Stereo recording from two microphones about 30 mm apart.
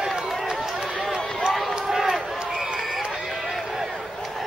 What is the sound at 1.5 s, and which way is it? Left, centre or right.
Run, centre.